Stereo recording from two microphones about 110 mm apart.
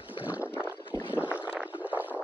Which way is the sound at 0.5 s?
15° right (ahead or behind).